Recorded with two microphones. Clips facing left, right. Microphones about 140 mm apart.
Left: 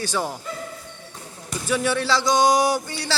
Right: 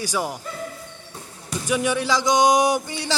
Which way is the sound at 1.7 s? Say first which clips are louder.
Even; 15° right (ahead or behind).